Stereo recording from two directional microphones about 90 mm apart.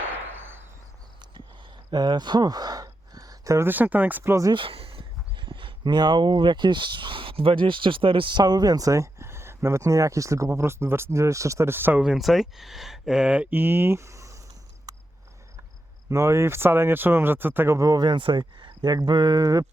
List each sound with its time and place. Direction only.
0.3 s a sound: 25° right (ahead or behind)
1.9 s a sound: 50° right (ahead or behind); by 3.7 s 35° right (ahead or behind)
3.7 s speech: 20° right (ahead or behind)
4.5 s speech: 80° right; by 12.0 s 20° right (ahead or behind)
12.0 s speech: centre (ahead or behind); by 14.3 s 35° right (ahead or behind)
14.9 s cricket: 45° right (ahead or behind)
16.0 s speech: 35° right (ahead or behind)